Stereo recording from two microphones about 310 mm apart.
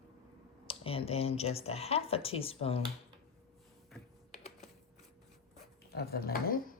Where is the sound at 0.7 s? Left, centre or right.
Centre.